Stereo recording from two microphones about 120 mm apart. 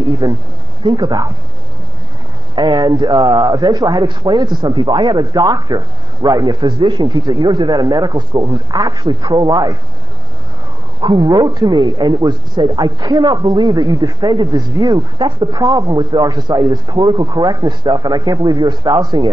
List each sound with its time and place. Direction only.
0.2 s a man's voice: 35° right (ahead or behind)
2.5 s a man's voice: 40° right (ahead or behind)
11.0 s a man's voice: 40° right (ahead or behind)